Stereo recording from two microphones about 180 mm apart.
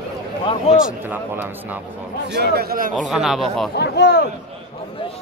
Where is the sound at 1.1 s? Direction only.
10° right (ahead or behind).